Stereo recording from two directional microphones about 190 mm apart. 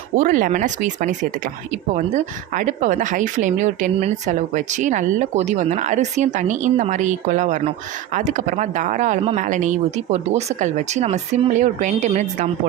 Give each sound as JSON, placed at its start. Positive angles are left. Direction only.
{"t": 0.2, "sound": "speech", "side_deg": -45}